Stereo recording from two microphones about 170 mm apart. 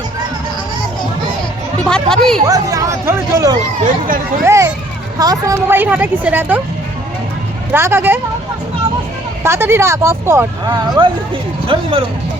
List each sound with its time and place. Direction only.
1.8 s speech: 5° left (ahead or behind)
2.5 s speech: 20° right (ahead or behind)
3.8 s speech: 55° right (ahead or behind)
4.4 s a woman's voice: 15° right (ahead or behind)
7.7 s a woman's voice: 15° right (ahead or behind)
9.4 s a woman's voice: 15° right (ahead or behind); by 12.0 s 30° right (ahead or behind)